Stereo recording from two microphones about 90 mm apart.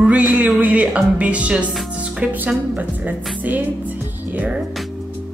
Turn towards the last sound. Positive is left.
turn(degrees=-20)  # may be behind; listen again after turning